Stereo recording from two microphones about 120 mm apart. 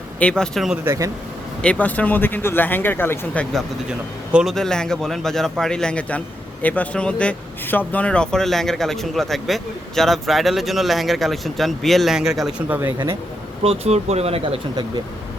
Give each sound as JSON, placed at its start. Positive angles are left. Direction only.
{"t": 0.2, "sound": "speech", "side_deg": 10}
{"t": 0.9, "sound": "speech", "side_deg": -30}
{"t": 1.6, "sound": "speech", "side_deg": 10}
{"t": 3.5, "sound": "speech", "side_deg": -5}
{"t": 4.5, "sound": "speech", "side_deg": 5}
{"t": 12.6, "sound": "speech", "side_deg": -15}
{"t": 13.6, "sound": "speech", "side_deg": -60}